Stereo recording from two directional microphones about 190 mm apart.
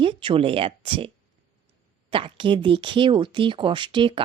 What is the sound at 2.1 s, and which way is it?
A woman's voice, 25° right (ahead or behind).